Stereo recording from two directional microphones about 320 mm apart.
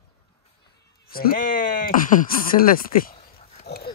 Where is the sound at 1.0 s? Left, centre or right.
Left.